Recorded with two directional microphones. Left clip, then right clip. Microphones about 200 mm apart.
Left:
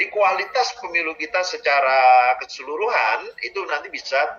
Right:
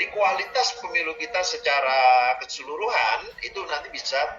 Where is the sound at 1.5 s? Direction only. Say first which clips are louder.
Left 5 dB; 35° left (ahead or behind).